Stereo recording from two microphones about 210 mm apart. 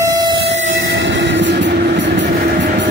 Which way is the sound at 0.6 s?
60° right (ahead or behind).